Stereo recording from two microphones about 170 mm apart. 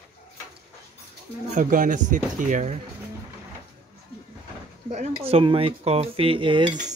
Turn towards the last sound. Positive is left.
turn(degrees=-30)  # may be behind; listen again after turning